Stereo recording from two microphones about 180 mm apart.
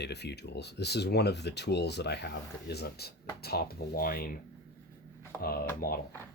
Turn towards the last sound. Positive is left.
turn(degrees=55)  # may be behind; listen again after turning